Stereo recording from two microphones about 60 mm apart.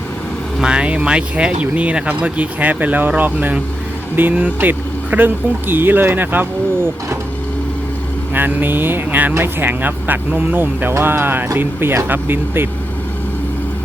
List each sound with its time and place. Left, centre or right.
0.6 s speech: centre; by 6.9 s right
8.3 s speech: right